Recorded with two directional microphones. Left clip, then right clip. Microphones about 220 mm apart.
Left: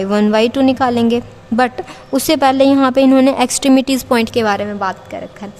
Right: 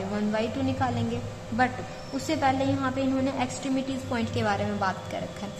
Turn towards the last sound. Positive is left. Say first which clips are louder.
# left 7 dB
turn(degrees=35)  # may be behind; listen again after turning